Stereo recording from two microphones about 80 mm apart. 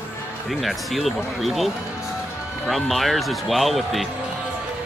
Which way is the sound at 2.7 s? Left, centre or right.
Centre.